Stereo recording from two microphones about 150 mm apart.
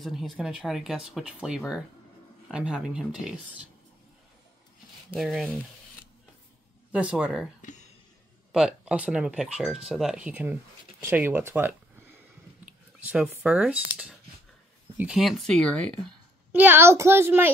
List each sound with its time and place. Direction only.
0.0 s speech: centre (ahead or behind)
5.1 s speech: centre (ahead or behind)
6.9 s speech: 10° right (ahead or behind)
16.5 s speech: 15° right (ahead or behind)